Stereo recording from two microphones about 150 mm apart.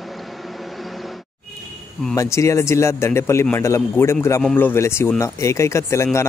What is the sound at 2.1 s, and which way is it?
A man's voice, 20° left (ahead or behind).